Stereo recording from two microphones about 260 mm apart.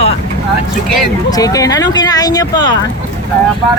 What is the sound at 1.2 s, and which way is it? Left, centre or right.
Speech, centre.